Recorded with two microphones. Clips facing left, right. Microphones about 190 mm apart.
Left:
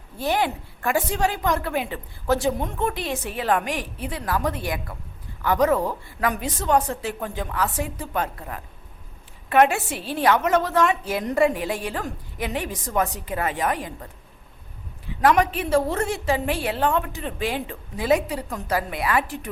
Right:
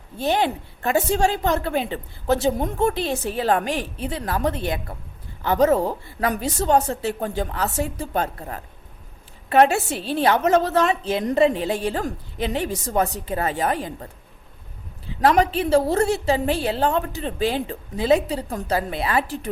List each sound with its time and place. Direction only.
0.2 s a woman's voice: 25° right (ahead or behind)